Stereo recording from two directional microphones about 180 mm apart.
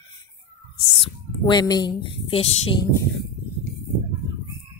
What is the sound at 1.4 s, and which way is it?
Speech, 20° left (ahead or behind).